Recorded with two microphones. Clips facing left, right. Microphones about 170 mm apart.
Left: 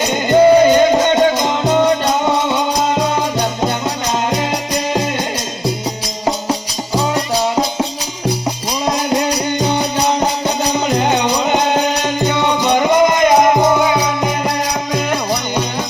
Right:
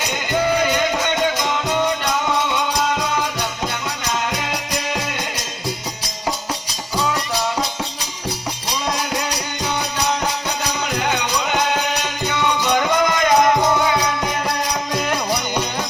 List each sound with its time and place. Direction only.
0.1 s music: 30° left (ahead or behind)
6.5 s music: 40° left (ahead or behind)
9.6 s music: 30° left (ahead or behind)
14.9 s music: 10° left (ahead or behind)